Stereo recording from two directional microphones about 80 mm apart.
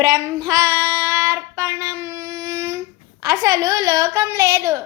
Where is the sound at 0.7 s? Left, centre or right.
Right.